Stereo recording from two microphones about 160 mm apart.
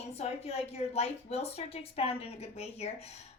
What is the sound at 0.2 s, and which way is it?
A woman's voice, 40° left (ahead or behind).